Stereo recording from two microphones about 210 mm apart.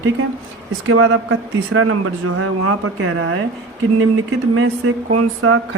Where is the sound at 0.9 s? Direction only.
90° right.